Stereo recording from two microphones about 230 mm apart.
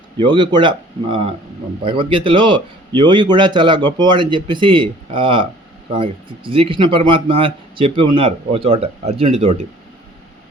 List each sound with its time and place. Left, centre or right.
0.2 s speech: right